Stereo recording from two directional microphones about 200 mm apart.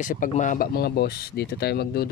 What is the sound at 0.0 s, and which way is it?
Speech, 40° left (ahead or behind).